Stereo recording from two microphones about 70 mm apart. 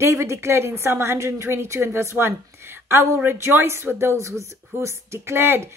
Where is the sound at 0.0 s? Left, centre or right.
Right.